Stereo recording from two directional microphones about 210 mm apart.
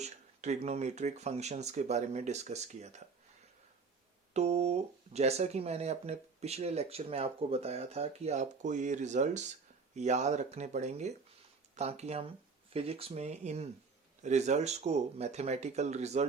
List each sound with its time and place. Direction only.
0.0 s speech: 30° right (ahead or behind)
4.4 s speech: 30° right (ahead or behind)